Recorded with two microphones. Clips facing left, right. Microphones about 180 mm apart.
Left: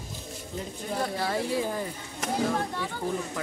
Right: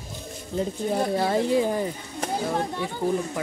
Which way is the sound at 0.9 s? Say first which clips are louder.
Right 5 dB; 25° right (ahead or behind).